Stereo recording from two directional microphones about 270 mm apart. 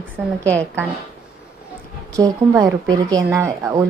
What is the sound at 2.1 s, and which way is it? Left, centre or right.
A woman's voice, centre.